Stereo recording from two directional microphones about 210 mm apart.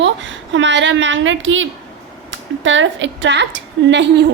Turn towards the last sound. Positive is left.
turn(degrees=-55)  # may be behind; listen again after turning